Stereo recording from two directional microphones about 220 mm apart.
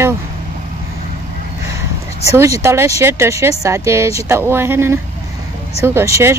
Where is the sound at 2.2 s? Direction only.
15° right (ahead or behind).